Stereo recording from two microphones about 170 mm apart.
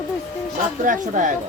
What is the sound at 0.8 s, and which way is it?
Speech, 50° right (ahead or behind).